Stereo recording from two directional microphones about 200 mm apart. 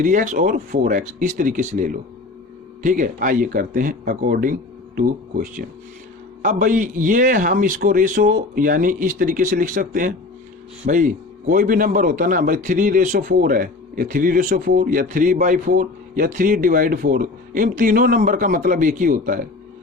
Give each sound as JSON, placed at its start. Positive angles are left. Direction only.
{"t": 0.0, "sound": "a man's voice", "side_deg": -40}